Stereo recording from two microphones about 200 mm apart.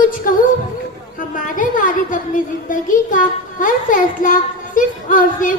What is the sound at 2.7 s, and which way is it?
Music, 40° left (ahead or behind).